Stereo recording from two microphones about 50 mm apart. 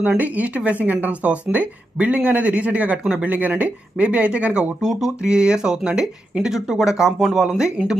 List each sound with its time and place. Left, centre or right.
0.2 s speech: right
3.0 s speech: centre
3.2 s speech: right
4.8 s speech: centre